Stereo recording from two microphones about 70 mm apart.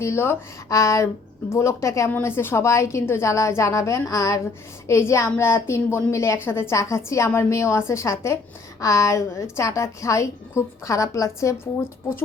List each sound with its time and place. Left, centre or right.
0.0 s a woman's voice: left
0.7 s a woman's voice: left
2.0 s a woman's voice: left
4.9 s a woman's voice: left
6.7 s a woman's voice: left